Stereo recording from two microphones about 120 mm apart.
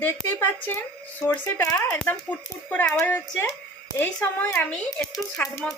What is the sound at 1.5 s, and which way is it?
Speech, 30° left (ahead or behind).